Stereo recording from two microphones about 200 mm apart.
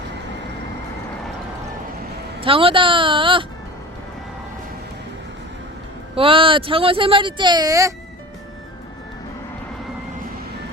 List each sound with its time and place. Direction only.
2.4 s speech: 25° right (ahead or behind)
6.1 s speech: 25° right (ahead or behind)